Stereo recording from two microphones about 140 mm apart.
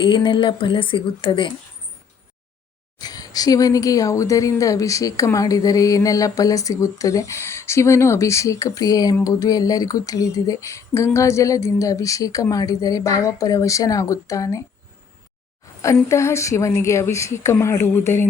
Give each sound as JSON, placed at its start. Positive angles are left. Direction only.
{"t": 0.0, "sound": "speech", "side_deg": 35}
{"t": 3.0, "sound": "a woman's voice", "side_deg": 25}
{"t": 16.0, "sound": "a woman's voice", "side_deg": 20}